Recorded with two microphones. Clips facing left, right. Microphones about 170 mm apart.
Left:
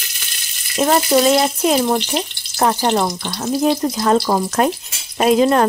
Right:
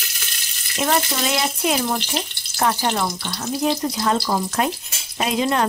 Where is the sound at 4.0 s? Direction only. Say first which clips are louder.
Left 7 dB; 50° left (ahead or behind).